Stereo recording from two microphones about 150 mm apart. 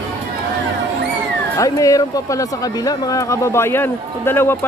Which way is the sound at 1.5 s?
25° left (ahead or behind).